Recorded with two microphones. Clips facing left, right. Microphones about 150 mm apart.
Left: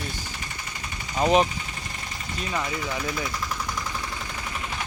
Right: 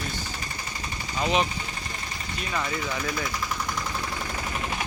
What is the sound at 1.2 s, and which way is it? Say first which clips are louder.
Speech: left 5 dB; 45° left (ahead or behind).